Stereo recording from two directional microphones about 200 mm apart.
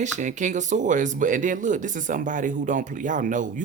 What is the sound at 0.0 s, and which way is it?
Speech, 40° right (ahead or behind).